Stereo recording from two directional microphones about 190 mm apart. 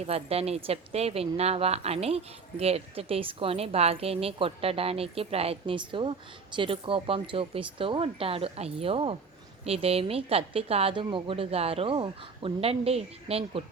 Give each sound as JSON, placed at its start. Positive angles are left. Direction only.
{"t": 0.0, "sound": "speech", "side_deg": -30}